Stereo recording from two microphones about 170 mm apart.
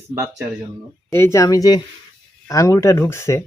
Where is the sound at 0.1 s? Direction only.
15° right (ahead or behind).